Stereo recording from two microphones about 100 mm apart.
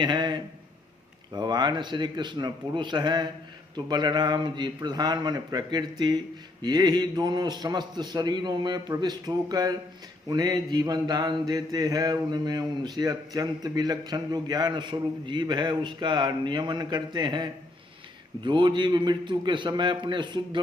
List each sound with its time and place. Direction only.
0.0 s a sound: 50° right (ahead or behind)
1.3 s a man's voice: 45° right (ahead or behind)
10.2 s mantra: 40° right (ahead or behind)
13.0 s a man's voice: 35° right (ahead or behind)